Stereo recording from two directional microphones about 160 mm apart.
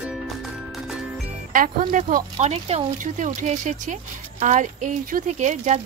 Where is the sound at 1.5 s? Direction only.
60° right (ahead or behind).